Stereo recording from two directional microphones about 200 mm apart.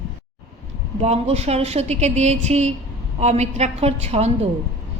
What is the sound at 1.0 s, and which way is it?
A woman's voice, 30° right (ahead or behind).